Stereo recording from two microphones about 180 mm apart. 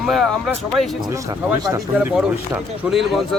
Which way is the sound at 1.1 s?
15° right (ahead or behind).